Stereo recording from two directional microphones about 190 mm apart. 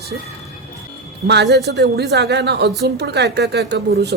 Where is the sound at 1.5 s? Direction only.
60° right (ahead or behind).